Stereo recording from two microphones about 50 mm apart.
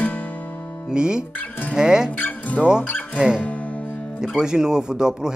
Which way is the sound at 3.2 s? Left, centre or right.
Centre.